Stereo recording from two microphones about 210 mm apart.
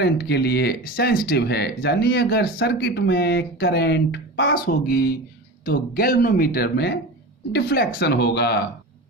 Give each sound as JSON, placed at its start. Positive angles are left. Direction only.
{"t": 0.0, "sound": "speech", "side_deg": 50}